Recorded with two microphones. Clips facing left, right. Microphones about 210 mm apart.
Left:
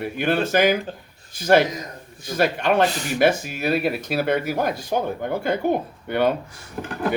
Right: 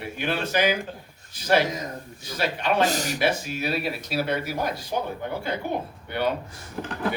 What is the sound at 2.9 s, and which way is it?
Speech, 40° right (ahead or behind).